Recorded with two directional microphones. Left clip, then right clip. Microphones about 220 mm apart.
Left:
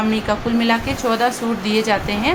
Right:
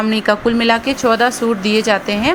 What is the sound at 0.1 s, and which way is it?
A woman's voice, 25° right (ahead or behind).